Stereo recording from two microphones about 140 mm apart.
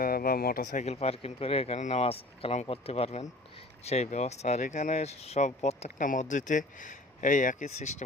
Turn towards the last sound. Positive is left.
turn(degrees=55)  # may be behind; listen again after turning